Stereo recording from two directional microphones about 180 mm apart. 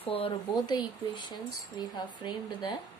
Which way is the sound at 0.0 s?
30° left (ahead or behind).